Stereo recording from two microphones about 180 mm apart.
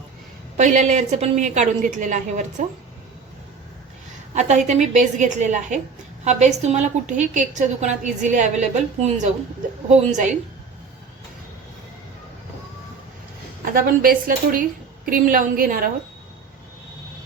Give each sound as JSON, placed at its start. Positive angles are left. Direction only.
{"t": 0.5, "sound": "a woman's voice", "side_deg": -40}
{"t": 4.4, "sound": "a woman's voice", "side_deg": -40}
{"t": 13.7, "sound": "a woman's voice", "side_deg": -50}